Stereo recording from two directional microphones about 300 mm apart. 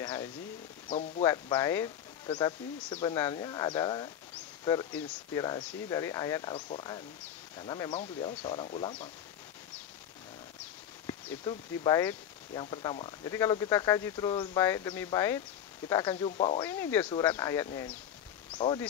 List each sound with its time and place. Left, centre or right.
0.0 s a sound: centre
0.8 s speech: left
1.2 s speech: centre
11.1 s speech: centre
16.6 s speech: centre